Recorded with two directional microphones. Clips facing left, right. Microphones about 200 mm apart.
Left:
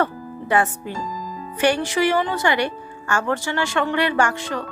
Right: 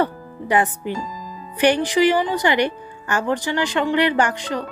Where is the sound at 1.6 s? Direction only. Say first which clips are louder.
Right 3 dB; 15° right (ahead or behind).